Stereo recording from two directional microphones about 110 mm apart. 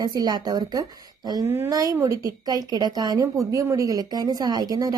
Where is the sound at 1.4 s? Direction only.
20° right (ahead or behind).